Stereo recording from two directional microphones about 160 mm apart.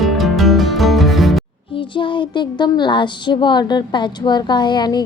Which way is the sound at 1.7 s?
30° left (ahead or behind).